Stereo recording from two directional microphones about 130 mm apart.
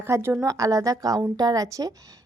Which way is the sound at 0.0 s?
20° right (ahead or behind).